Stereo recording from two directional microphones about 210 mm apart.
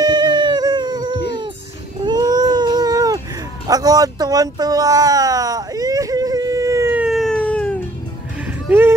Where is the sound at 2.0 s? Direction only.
20° right (ahead or behind).